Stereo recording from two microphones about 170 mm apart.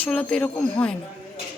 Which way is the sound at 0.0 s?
5° left (ahead or behind).